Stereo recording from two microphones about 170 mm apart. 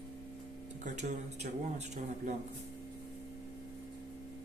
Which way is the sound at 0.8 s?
45° right (ahead or behind).